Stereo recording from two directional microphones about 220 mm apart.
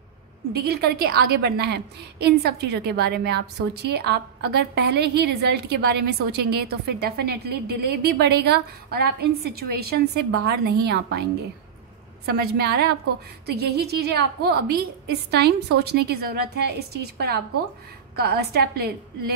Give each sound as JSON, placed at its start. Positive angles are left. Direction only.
{"t": 0.5, "sound": "a woman's voice", "side_deg": -45}
{"t": 12.3, "sound": "a woman's voice", "side_deg": -45}